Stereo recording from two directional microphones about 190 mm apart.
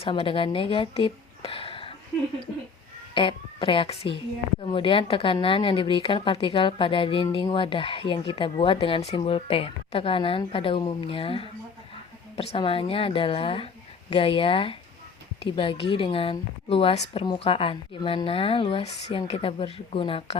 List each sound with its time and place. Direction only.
0.0 s speech: 30° left (ahead or behind)
3.2 s a woman's voice: 25° left (ahead or behind)